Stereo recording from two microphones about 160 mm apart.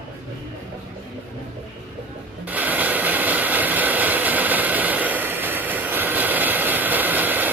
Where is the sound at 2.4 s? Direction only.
10° right (ahead or behind).